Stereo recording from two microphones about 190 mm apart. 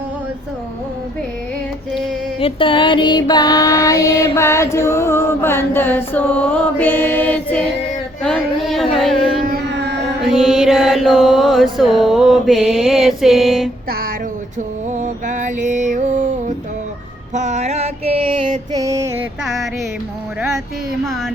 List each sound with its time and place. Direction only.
2.4 s child singing: 25° left (ahead or behind); by 7.7 s 5° left (ahead or behind)
8.2 s a sound: centre (ahead or behind)
9.5 s music: 60° right (ahead or behind)
10.2 s mantra: centre (ahead or behind)
14.9 s music: 40° right (ahead or behind)
17.3 s mantra: 35° right (ahead or behind)
18.7 s music: 15° right (ahead or behind)